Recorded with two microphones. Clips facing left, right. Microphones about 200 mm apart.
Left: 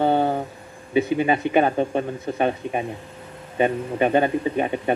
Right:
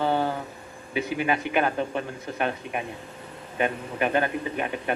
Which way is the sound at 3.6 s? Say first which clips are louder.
Left 6 dB; 25° left (ahead or behind).